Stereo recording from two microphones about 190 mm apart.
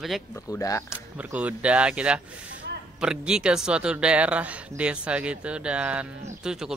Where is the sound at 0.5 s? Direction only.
15° left (ahead or behind).